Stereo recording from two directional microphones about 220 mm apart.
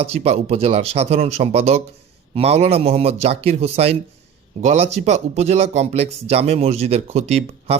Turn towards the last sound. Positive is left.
turn(degrees=-30)  # may be behind; listen again after turning